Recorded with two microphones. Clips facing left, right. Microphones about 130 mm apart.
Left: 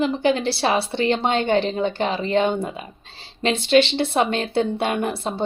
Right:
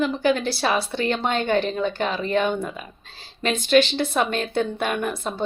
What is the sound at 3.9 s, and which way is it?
A woman's voice, 25° left (ahead or behind).